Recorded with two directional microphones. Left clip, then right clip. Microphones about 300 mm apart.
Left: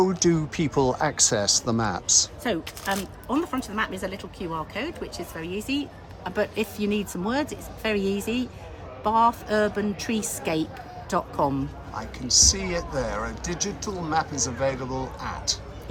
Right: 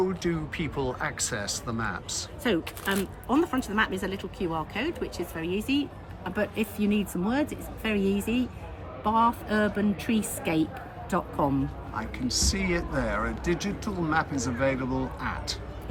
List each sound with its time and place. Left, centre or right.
0.0 s speech: centre
2.4 s a woman's voice: centre